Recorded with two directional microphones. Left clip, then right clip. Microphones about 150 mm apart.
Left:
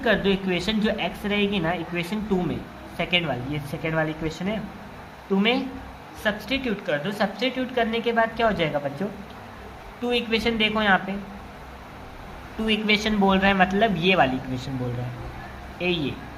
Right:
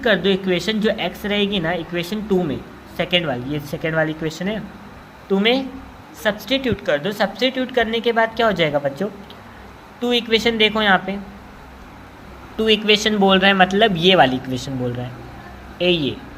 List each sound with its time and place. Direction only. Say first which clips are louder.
0.0 s a woman's voice: right 5 dB; 20° right (ahead or behind)
12.5 s a woman's voice: right 7 dB; 25° right (ahead or behind)
15.8 s a woman's voice: right 8 dB; 20° right (ahead or behind)